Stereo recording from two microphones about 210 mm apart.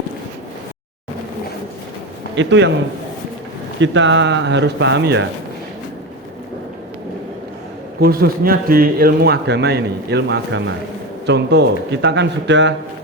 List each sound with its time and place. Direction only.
2.3 s a man's voice: 60° right (ahead or behind)
3.8 s a man's voice: 60° right (ahead or behind)
8.0 s a man's voice: 45° right (ahead or behind)